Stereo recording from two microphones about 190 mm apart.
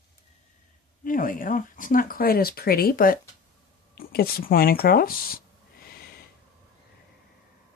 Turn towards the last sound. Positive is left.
turn(degrees=50)  # may be behind; listen again after turning